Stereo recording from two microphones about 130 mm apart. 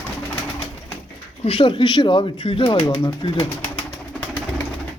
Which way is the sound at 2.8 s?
35° left (ahead or behind).